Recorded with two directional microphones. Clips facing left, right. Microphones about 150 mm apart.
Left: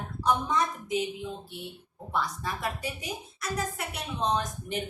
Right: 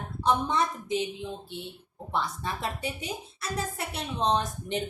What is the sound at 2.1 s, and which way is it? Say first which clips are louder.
Speech: even; 25° right (ahead or behind).